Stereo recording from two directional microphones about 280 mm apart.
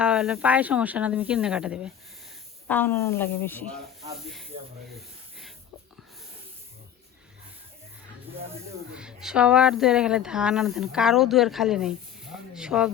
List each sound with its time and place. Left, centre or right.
0.0 s speech: centre
8.4 s speech: right
9.0 s speech: centre